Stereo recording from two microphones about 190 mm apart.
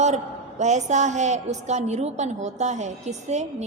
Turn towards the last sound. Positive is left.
turn(degrees=-35)  # may be behind; listen again after turning